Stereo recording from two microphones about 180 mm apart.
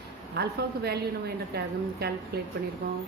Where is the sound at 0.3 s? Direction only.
65° right (ahead or behind).